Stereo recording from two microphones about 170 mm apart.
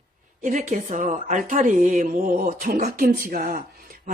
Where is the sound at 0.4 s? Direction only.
45° right (ahead or behind).